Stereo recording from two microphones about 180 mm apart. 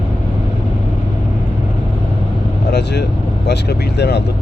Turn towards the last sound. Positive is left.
turn(degrees=70)  # may be behind; listen again after turning